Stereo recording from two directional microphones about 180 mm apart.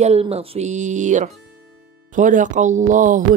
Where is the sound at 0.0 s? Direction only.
35° right (ahead or behind).